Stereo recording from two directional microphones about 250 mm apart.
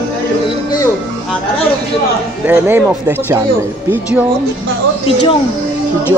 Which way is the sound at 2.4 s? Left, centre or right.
Centre.